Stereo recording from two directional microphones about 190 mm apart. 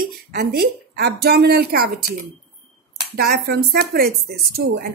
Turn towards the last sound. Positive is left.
turn(degrees=-55)  # may be behind; listen again after turning